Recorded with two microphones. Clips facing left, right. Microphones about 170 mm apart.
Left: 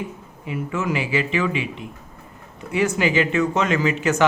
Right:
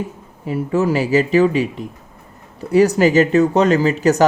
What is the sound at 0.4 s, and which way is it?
A man's voice, 35° right (ahead or behind).